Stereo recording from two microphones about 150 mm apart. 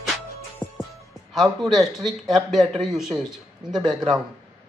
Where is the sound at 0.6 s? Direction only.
10° left (ahead or behind).